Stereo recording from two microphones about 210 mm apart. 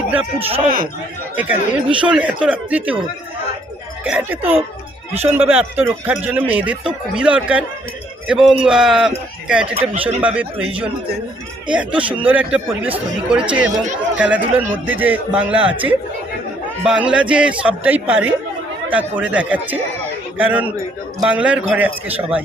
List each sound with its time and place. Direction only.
0.3 s speech: 30° right (ahead or behind)
1.4 s speech: 5° right (ahead or behind)
4.0 s speech: 5° right (ahead or behind)
9.9 s speech: 30° right (ahead or behind)
10.2 s speech: 5° right (ahead or behind)
11.7 s speech: 5° right (ahead or behind)
16.8 s speech: 5° right (ahead or behind)